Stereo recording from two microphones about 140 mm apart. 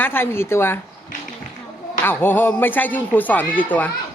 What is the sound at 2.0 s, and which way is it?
A woman's voice, 15° left (ahead or behind).